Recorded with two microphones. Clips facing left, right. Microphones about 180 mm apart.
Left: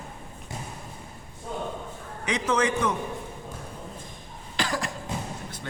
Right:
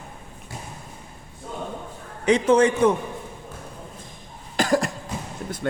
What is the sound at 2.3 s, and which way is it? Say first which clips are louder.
Speech: right 8 dB; 30° right (ahead or behind).